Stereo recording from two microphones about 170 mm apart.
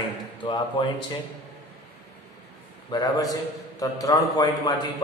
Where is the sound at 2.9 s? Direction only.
25° left (ahead or behind).